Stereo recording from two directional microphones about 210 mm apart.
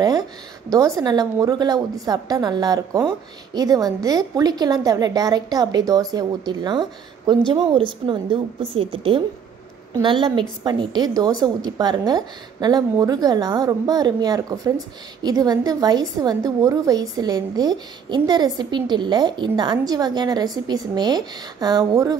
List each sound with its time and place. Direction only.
0.7 s a woman's voice: 15° right (ahead or behind)